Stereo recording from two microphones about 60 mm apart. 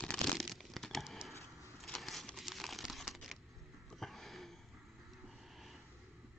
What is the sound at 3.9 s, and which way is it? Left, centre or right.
Sniff, centre.